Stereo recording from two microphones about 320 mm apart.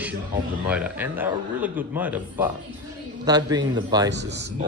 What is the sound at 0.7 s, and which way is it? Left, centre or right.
A man's voice, centre.